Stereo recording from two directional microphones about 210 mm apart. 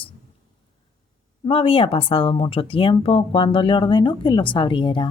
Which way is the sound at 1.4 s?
25° left (ahead or behind).